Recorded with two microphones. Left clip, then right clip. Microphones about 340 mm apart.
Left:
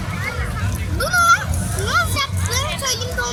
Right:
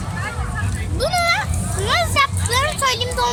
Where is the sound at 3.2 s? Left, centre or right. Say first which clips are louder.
Right 5 dB; right.